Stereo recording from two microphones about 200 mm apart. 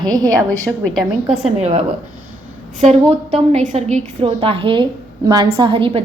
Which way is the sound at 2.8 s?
35° right (ahead or behind).